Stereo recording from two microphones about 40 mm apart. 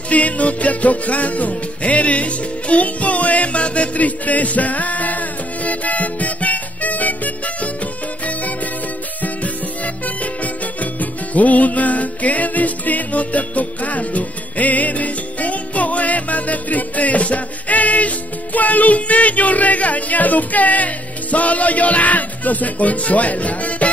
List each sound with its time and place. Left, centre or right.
0.1 s music: left
10.0 s music: left